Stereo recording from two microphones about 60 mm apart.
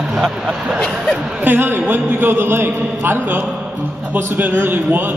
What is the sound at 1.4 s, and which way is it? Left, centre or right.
A man's voice, right.